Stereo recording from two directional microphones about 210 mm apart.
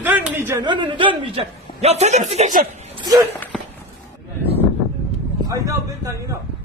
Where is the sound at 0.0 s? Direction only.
5° right (ahead or behind); by 2.9 s 35° right (ahead or behind).